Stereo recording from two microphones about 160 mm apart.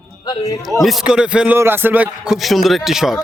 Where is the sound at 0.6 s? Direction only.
Centre (ahead or behind).